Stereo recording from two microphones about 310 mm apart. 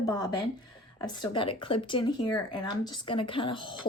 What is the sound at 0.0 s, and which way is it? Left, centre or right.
Speech, centre.